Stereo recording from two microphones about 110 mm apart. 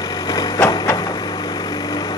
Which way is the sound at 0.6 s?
30° left (ahead or behind).